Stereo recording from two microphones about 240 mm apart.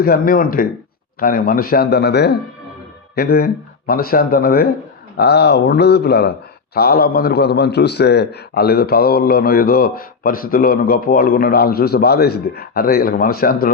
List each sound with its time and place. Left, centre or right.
0.0 s a man's voice: left